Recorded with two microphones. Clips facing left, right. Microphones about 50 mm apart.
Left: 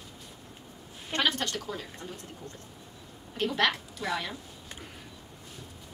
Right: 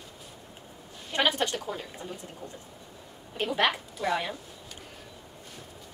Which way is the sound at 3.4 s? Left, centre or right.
Centre.